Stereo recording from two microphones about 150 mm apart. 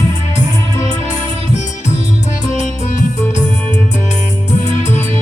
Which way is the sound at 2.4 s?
55° left (ahead or behind).